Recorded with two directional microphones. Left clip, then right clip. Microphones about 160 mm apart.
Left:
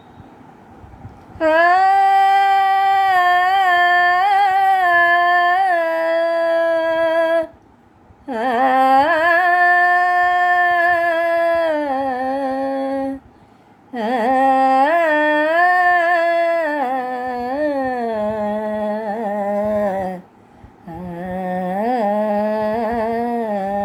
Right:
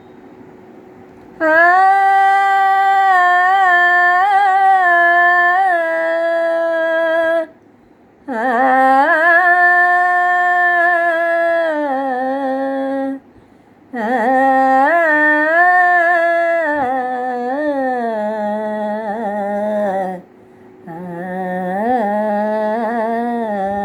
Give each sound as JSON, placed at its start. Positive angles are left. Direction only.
{"t": 1.4, "sound": "a sound", "side_deg": 15}
{"t": 8.3, "sound": "humming", "side_deg": 15}
{"t": 13.9, "sound": "carnatic music", "side_deg": 10}
{"t": 19.5, "sound": "humming", "side_deg": 15}